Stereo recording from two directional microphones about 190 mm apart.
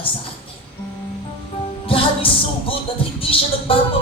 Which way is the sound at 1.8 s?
30° left (ahead or behind).